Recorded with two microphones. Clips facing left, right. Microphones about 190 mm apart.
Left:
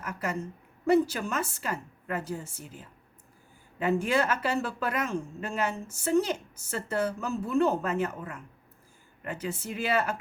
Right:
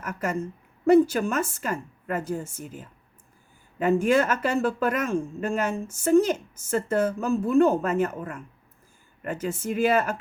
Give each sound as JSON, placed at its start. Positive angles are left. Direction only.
{"t": 0.0, "sound": "speech", "side_deg": -50}